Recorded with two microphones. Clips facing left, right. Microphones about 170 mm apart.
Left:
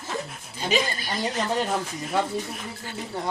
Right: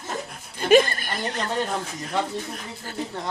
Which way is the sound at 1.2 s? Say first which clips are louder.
Left 1 dB; 5° left (ahead or behind).